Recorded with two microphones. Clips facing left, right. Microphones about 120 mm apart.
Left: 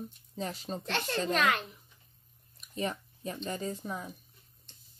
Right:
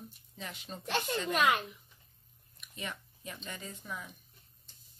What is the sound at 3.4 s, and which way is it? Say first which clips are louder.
Speech: left 8 dB; 35° left (ahead or behind).